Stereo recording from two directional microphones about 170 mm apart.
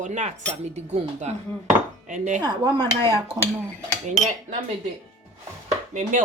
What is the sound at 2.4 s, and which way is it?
Dishes, 25° right (ahead or behind).